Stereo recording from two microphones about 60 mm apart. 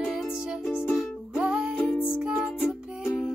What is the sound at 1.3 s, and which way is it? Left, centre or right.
Music, centre.